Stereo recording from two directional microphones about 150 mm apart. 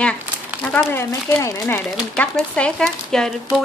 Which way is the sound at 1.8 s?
5° left (ahead or behind).